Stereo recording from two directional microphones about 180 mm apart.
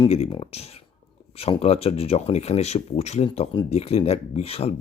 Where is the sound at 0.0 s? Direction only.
30° left (ahead or behind).